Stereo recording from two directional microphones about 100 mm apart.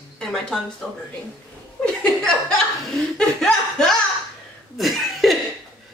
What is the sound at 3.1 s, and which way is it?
Chuckle, 5° left (ahead or behind).